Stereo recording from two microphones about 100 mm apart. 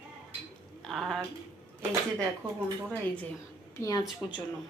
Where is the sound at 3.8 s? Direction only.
40° left (ahead or behind).